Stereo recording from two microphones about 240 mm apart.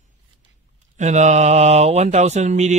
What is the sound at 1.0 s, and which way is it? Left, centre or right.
Mantra, right.